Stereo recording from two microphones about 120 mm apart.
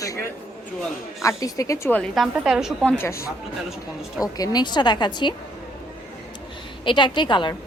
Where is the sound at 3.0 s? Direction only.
25° left (ahead or behind); by 5.3 s 40° left (ahead or behind).